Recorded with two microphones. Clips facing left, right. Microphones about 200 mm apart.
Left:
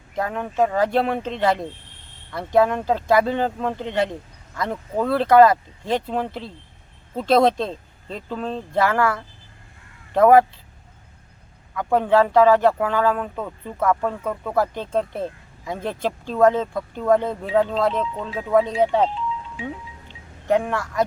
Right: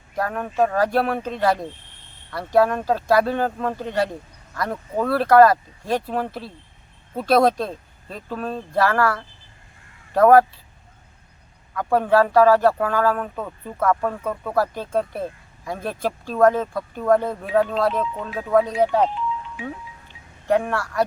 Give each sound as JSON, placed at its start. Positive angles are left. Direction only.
{"t": 0.2, "sound": "speech", "side_deg": 20}
{"t": 8.7, "sound": "speech", "side_deg": 20}
{"t": 11.7, "sound": "speech", "side_deg": 15}
{"t": 13.2, "sound": "speech", "side_deg": -5}
{"t": 14.5, "sound": "speech", "side_deg": 20}
{"t": 19.5, "sound": "music", "side_deg": 20}